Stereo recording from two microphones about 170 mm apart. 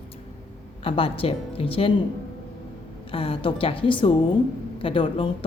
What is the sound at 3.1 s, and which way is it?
Speech, 35° left (ahead or behind).